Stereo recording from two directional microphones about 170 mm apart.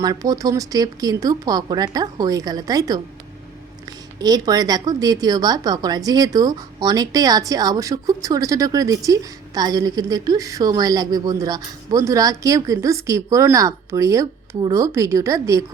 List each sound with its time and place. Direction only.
0.0 s a woman's voice: 20° right (ahead or behind)